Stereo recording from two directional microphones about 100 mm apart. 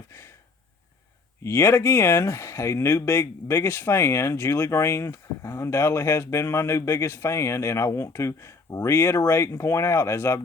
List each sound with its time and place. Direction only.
1.5 s speech: 25° left (ahead or behind)